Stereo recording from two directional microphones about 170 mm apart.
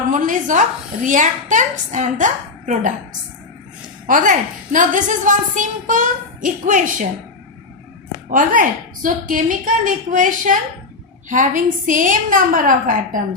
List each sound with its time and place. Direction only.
0.1 s a woman's voice: 50° right (ahead or behind)
4.0 s a woman's voice: 50° right (ahead or behind)
8.3 s a woman's voice: 50° right (ahead or behind)